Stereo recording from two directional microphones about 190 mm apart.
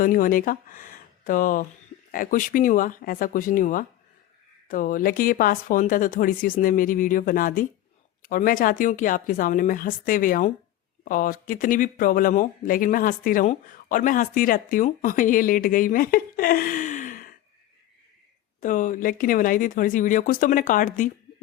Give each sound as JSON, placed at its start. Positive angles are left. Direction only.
{"t": 0.0, "sound": "speech", "side_deg": 45}
{"t": 18.6, "sound": "speech", "side_deg": 45}